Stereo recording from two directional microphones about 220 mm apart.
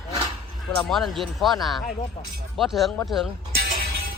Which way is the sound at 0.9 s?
Centre (ahead or behind).